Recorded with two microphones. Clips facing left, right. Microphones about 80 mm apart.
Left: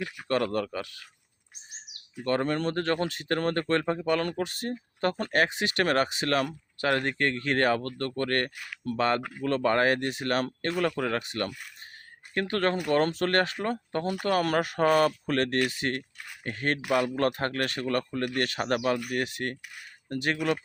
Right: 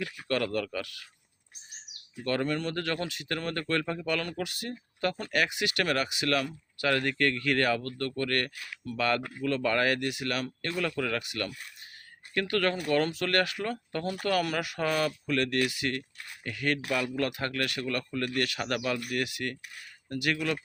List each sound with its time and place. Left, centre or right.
0.0 s speech: left
2.2 s speech: left
2.5 s speech: left